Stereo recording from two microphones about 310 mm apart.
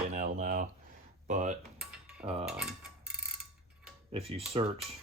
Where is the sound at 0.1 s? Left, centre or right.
Right.